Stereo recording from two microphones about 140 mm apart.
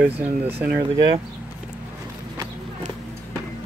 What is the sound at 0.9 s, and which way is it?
Speech, 30° right (ahead or behind).